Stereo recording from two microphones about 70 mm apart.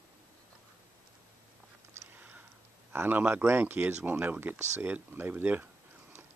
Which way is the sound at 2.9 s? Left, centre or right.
Right.